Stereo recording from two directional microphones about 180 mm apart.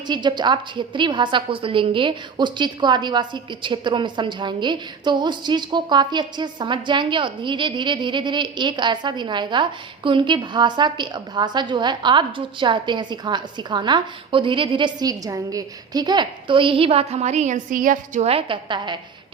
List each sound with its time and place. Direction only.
0.1 s a woman's voice: 25° right (ahead or behind)